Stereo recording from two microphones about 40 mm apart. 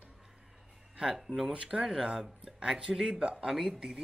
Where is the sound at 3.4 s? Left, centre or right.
Centre.